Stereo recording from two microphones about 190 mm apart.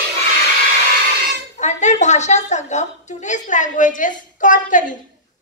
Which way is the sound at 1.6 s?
40° left (ahead or behind).